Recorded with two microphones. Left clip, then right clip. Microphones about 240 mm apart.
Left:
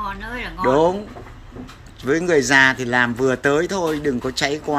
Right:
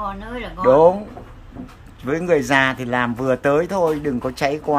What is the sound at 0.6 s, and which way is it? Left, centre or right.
Speech, centre.